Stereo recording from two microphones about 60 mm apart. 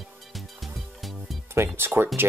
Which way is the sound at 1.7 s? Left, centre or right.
Right.